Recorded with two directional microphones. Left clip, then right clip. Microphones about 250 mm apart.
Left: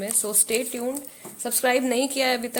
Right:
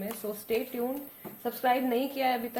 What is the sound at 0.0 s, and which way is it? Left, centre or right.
Speech, left.